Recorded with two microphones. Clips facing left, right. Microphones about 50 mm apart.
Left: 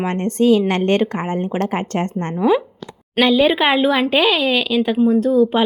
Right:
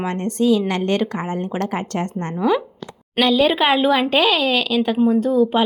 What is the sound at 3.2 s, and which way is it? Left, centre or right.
Speech, centre.